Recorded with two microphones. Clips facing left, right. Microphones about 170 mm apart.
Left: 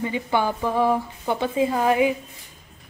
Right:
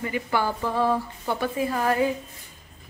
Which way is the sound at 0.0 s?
20° left (ahead or behind).